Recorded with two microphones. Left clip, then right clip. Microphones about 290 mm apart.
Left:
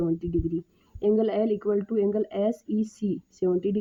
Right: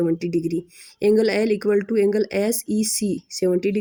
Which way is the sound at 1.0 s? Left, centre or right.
Left.